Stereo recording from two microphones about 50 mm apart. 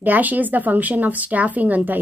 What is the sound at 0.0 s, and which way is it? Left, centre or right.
Speech, right.